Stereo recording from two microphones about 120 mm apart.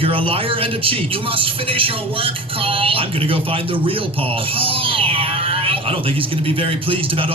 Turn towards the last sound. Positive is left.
turn(degrees=-50)  # may be behind; listen again after turning